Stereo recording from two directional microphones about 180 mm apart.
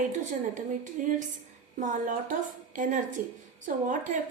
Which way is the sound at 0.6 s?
45° right (ahead or behind).